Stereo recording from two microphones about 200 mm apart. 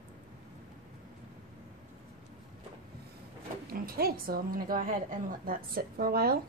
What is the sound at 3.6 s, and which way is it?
A woman's voice, 45° right (ahead or behind).